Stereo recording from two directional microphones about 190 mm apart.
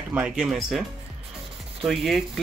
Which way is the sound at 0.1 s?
5° right (ahead or behind).